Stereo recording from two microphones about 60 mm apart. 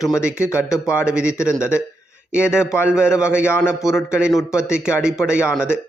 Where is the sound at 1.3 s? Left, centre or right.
Left.